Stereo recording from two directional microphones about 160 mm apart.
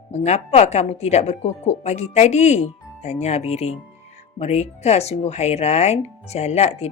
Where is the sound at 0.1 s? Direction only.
45° left (ahead or behind).